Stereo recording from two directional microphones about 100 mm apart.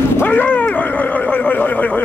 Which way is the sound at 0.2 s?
15° left (ahead or behind).